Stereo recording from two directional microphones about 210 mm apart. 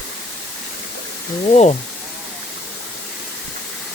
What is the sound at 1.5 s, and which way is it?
Speech, 30° left (ahead or behind).